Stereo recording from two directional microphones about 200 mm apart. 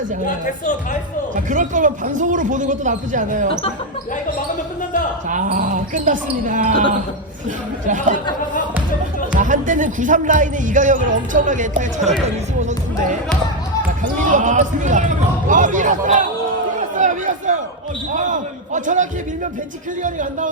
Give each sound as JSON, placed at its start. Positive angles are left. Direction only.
{"t": 1.5, "sound": "speech", "side_deg": -40}
{"t": 5.3, "sound": "speech", "side_deg": -40}
{"t": 7.9, "sound": "speech", "side_deg": -40}
{"t": 9.3, "sound": "speech", "side_deg": -40}
{"t": 14.0, "sound": "speech", "side_deg": -40}
{"t": 16.9, "sound": "chatter", "side_deg": -40}
{"t": 18.1, "sound": "basketball bounce", "side_deg": -40}
{"t": 20.0, "sound": "speech", "side_deg": -40}